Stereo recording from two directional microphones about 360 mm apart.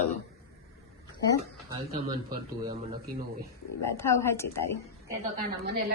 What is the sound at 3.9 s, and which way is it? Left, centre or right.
Speech, centre.